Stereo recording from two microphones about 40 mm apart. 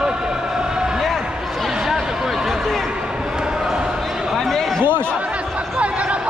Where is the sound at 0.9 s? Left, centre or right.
Centre.